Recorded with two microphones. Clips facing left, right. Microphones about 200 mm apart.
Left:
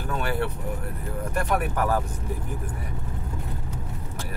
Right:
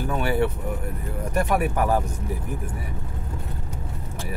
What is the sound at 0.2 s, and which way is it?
Vehicle, 10° right (ahead or behind).